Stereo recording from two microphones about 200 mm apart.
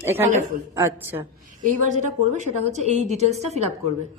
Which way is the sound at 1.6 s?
40° right (ahead or behind).